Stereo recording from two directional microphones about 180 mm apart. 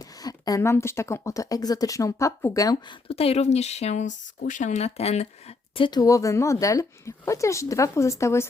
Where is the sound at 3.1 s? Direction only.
35° left (ahead or behind).